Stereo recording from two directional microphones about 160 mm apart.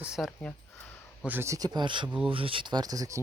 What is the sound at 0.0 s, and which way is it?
Speech, 5° right (ahead or behind).